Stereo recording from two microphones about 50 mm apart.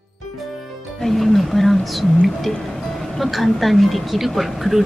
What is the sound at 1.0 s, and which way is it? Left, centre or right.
A woman's voice, centre.